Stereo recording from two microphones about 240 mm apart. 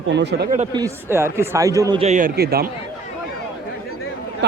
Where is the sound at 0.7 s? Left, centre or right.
Centre.